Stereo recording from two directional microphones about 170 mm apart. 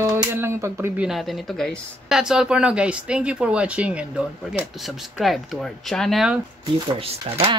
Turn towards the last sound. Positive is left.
turn(degrees=-35)  # may be behind; listen again after turning